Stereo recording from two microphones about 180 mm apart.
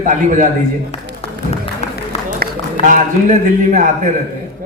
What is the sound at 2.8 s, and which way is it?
Speech, 45° right (ahead or behind).